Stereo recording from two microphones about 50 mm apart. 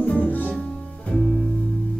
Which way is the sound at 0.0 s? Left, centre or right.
Left.